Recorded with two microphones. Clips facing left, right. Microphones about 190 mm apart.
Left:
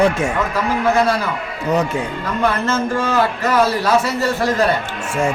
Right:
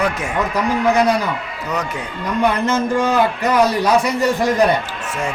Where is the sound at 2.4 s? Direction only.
15° right (ahead or behind).